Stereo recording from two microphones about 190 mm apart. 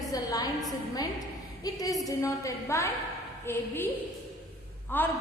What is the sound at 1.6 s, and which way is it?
A woman's voice, 20° left (ahead or behind).